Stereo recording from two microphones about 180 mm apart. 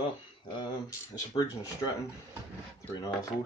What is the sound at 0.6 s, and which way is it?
Speech, 20° left (ahead or behind).